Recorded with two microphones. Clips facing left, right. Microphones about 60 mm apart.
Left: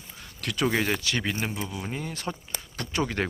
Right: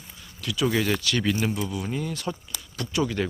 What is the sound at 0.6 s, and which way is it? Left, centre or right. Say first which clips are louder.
Speech: right 2 dB; left.